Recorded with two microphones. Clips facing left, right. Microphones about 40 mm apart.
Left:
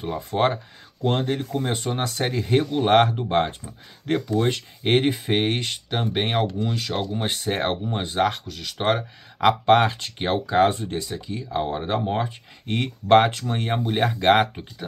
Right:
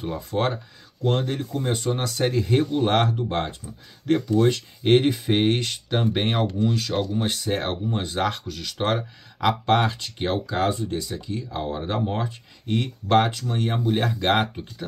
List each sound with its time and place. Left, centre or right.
0.0 s speech: left
2.6 s speech: left
11.1 s speech: centre
12.6 s speech: left
13.9 s speech: centre